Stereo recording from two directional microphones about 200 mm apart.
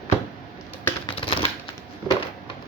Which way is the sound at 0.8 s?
25° left (ahead or behind).